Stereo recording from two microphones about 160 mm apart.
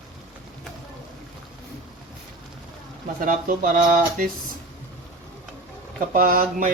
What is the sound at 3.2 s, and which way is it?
Speech, 60° right (ahead or behind).